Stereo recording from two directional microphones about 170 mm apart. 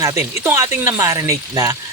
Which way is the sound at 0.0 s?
15° right (ahead or behind).